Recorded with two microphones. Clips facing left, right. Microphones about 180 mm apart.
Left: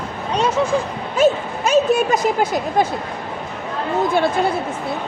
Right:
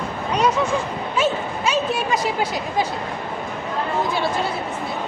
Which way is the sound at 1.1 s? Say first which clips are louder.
Left 6 dB; 45° left (ahead or behind).